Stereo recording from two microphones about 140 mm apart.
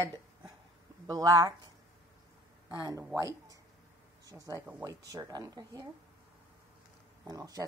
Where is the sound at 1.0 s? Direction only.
25° right (ahead or behind).